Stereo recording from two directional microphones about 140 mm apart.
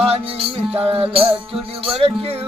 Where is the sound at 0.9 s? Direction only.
40° right (ahead or behind).